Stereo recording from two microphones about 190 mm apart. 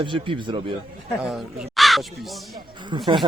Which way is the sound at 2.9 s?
25° right (ahead or behind).